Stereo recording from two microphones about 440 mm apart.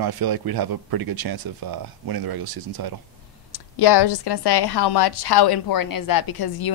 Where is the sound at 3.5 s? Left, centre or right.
Left.